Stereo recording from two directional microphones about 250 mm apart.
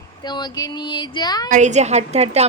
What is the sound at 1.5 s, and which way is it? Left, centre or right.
Speech, right.